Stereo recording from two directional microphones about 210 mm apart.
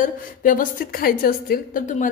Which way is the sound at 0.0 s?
40° left (ahead or behind).